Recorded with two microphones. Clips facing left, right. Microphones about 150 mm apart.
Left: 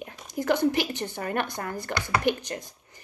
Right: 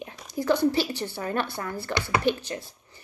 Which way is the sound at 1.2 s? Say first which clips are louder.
Even; 55° left (ahead or behind).